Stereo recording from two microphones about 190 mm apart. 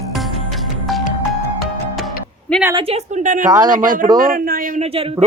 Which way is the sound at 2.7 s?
25° right (ahead or behind).